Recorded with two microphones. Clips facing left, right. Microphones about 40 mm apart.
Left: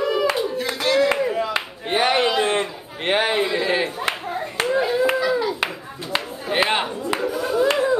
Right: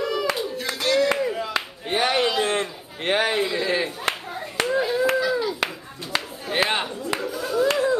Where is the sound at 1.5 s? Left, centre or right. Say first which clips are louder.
Left 2 dB; left.